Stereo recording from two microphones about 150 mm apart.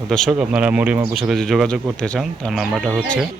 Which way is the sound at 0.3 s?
10° right (ahead or behind).